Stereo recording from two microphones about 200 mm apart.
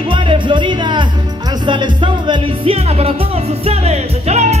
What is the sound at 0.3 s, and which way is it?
Music, 25° right (ahead or behind).